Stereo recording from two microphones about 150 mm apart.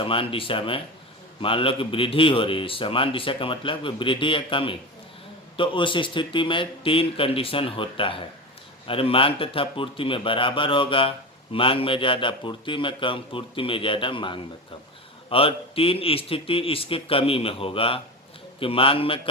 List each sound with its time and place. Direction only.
0.0 s a man's voice: 35° left (ahead or behind)